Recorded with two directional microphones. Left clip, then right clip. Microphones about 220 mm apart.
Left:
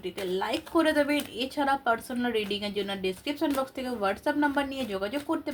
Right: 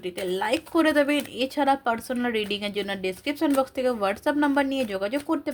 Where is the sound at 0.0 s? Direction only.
50° right (ahead or behind).